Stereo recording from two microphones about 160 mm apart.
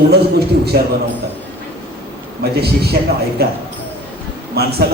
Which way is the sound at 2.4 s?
80° right.